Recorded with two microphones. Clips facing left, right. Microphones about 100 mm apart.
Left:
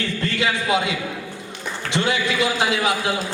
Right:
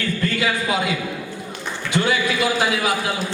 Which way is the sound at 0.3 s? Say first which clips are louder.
Left 3 dB; 25° left (ahead or behind).